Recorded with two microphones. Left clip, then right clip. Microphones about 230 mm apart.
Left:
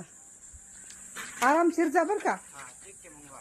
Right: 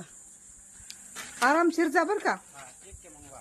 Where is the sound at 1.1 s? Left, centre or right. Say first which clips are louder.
Left 2 dB; right.